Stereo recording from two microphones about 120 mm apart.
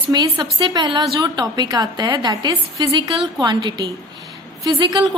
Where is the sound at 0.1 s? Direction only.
35° right (ahead or behind).